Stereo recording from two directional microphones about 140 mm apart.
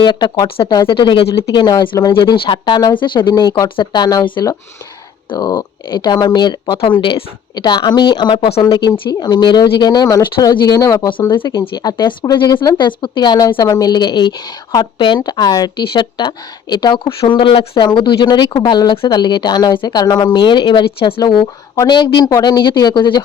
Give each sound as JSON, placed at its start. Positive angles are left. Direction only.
{"t": 0.0, "sound": "speech", "side_deg": 30}
{"t": 8.7, "sound": "speech", "side_deg": 30}